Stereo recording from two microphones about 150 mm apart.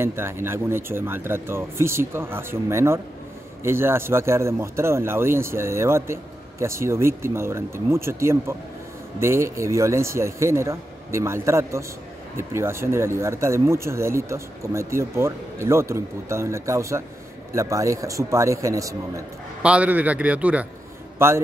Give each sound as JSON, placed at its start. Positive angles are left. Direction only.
{"t": 0.0, "sound": "speech", "side_deg": -15}
{"t": 19.6, "sound": "speech", "side_deg": -10}